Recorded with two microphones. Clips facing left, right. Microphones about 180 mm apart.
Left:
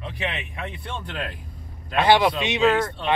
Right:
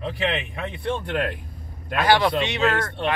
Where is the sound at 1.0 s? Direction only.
60° right (ahead or behind).